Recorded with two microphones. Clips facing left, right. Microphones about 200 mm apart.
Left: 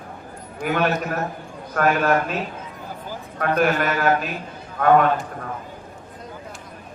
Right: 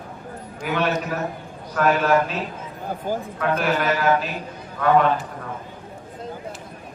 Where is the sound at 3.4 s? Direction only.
50° left (ahead or behind).